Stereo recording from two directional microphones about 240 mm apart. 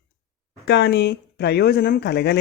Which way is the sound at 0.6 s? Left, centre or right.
Left.